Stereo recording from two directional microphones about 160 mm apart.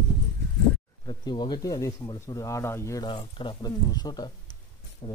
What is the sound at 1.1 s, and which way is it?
Speech, 25° left (ahead or behind).